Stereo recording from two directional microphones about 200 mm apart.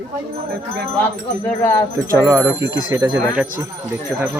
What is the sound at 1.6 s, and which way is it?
Speech, 10° left (ahead or behind).